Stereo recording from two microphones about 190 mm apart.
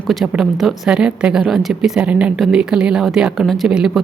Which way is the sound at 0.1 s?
Centre (ahead or behind).